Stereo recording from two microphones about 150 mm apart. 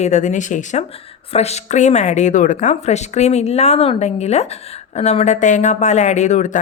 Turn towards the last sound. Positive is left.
turn(degrees=50)  # may be behind; listen again after turning